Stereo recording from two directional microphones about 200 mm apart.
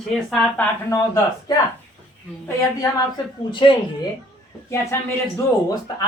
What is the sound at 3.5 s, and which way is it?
Speech, 25° left (ahead or behind).